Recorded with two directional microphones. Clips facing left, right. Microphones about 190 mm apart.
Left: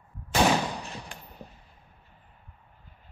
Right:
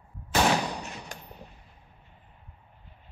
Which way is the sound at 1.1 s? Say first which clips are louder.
Right 2 dB; 40° right (ahead or behind).